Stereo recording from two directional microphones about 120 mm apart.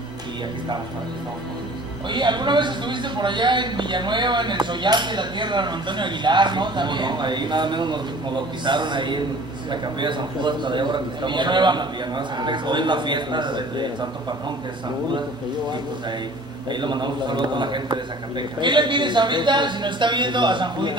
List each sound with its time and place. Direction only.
2.0 s speech: 40° right (ahead or behind)
16.8 s speech: 40° right (ahead or behind)